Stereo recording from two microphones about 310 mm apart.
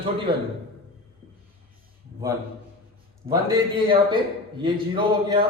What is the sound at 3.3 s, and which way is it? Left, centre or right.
Speech, centre.